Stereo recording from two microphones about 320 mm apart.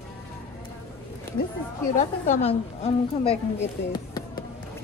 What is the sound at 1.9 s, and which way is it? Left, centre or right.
A woman's voice, left.